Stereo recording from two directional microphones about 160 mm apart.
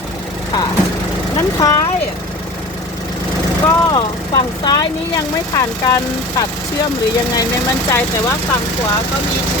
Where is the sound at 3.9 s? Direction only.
25° left (ahead or behind).